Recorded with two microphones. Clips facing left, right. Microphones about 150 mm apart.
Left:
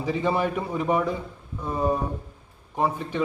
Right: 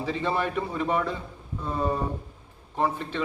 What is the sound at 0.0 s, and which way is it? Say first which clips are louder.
Speech: left 3 dB; 15° left (ahead or behind).